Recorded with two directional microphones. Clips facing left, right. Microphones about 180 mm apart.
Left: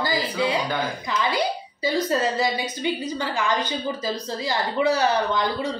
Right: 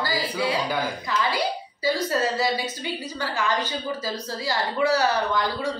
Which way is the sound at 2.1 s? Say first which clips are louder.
Left 1 dB; 20° left (ahead or behind).